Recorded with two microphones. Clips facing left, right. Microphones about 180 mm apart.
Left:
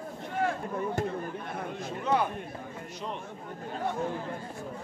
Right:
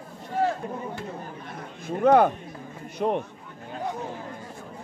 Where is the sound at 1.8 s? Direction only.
55° right (ahead or behind).